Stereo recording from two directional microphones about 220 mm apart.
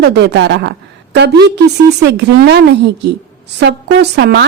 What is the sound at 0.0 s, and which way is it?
A woman's voice, 50° right (ahead or behind).